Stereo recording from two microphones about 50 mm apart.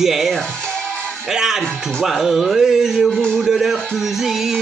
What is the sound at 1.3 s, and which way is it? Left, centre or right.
Speech, centre.